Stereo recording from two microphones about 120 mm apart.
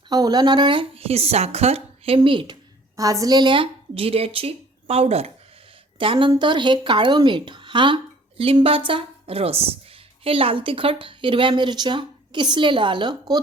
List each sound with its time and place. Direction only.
0.1 s speech: 35° right (ahead or behind)
2.9 s a woman's voice: 30° right (ahead or behind); by 5.3 s 60° right (ahead or behind)
6.0 s speech: 45° right (ahead or behind)